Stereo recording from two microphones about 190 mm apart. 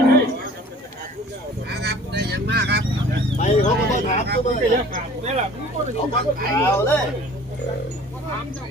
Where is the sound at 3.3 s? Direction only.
40° left (ahead or behind).